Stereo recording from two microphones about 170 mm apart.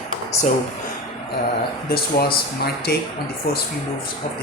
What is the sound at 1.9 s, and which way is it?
Speech, 65° left (ahead or behind).